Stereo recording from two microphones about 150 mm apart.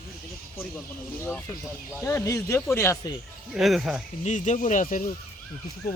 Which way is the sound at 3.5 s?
Centre (ahead or behind).